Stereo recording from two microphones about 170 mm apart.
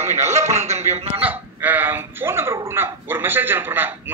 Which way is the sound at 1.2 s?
10° right (ahead or behind).